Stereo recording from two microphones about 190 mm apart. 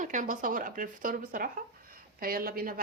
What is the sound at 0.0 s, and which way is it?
A woman's voice, 40° right (ahead or behind).